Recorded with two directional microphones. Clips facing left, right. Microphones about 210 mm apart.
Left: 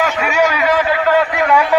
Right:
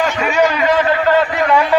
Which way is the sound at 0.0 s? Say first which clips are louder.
Right 1 dB; 5° left (ahead or behind).